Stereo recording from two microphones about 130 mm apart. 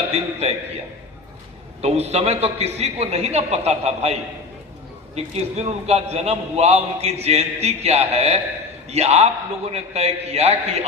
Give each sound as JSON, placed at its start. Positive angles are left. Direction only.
{"t": 0.1, "sound": "a man's voice", "side_deg": -50}
{"t": 1.8, "sound": "a man's voice", "side_deg": -55}